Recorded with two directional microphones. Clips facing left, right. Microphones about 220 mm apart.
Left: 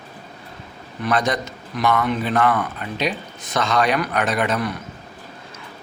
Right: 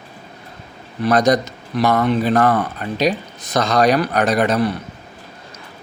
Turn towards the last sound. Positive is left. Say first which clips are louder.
# right 5 dB
turn(degrees=-35)  # may be behind; listen again after turning